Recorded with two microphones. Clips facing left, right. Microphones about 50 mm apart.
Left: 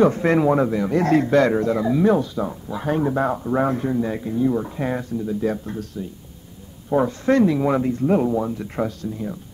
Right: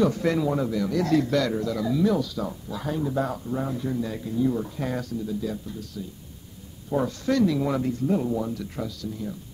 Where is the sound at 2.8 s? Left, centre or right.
Left.